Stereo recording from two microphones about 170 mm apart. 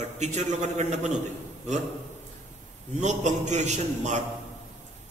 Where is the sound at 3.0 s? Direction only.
45° right (ahead or behind).